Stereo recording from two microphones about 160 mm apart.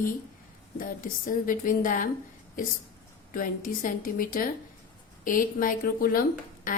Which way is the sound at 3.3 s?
60° left (ahead or behind).